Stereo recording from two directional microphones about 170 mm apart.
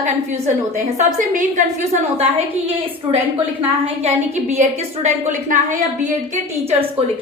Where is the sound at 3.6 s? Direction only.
40° right (ahead or behind).